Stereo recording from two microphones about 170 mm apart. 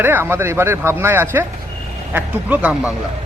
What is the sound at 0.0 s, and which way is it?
A man's voice, 10° right (ahead or behind).